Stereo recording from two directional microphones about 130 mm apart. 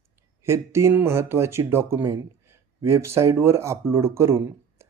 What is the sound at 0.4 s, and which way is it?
Speech, 20° right (ahead or behind).